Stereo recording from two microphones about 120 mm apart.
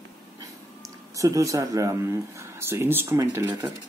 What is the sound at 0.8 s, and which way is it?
Speech, 25° right (ahead or behind).